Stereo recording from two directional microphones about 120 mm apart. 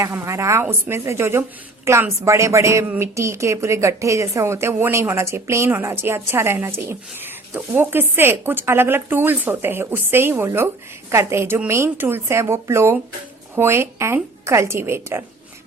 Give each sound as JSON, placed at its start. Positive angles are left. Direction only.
{"t": 0.0, "sound": "a woman's voice", "side_deg": -25}